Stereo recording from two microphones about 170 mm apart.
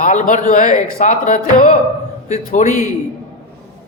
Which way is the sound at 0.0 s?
50° left (ahead or behind).